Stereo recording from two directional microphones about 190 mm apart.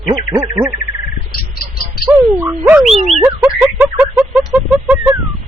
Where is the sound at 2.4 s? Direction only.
10° right (ahead or behind).